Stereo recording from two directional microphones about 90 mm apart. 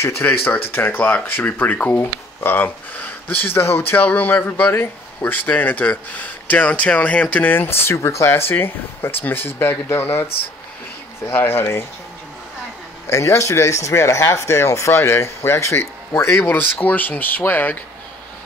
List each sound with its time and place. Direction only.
0.0 s speech: 25° left (ahead or behind)
11.2 s speech: 25° left (ahead or behind)
13.0 s speech: 30° left (ahead or behind)